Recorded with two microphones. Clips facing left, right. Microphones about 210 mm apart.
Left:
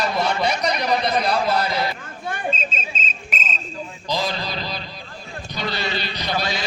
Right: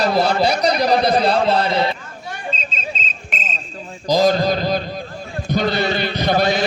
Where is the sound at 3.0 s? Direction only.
45° left (ahead or behind).